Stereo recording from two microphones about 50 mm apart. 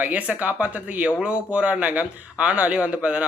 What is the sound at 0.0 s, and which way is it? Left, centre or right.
A man's voice, right.